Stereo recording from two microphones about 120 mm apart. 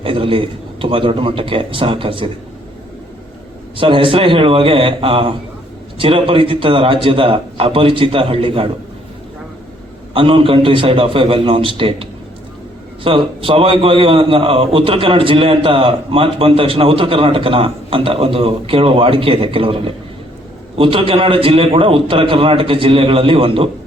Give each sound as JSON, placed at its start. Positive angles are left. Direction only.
{"t": 0.0, "sound": "a man's voice", "side_deg": -45}
{"t": 3.8, "sound": "a man's voice", "side_deg": -45}
{"t": 10.2, "sound": "a man's voice", "side_deg": -45}
{"t": 13.1, "sound": "a man's voice", "side_deg": -45}